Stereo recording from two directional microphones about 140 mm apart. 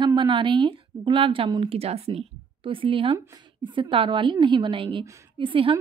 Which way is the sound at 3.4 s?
35° right (ahead or behind).